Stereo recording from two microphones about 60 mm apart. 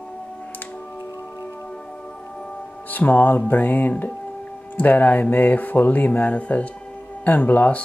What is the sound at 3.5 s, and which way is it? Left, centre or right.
Speech, left.